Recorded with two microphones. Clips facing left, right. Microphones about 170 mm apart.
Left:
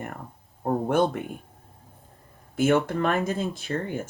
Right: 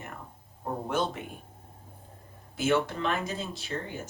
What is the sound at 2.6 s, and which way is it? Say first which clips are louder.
Speech: left 5 dB; 55° left (ahead or behind).